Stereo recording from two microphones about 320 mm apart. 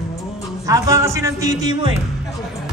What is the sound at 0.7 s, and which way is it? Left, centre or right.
A man's voice, centre.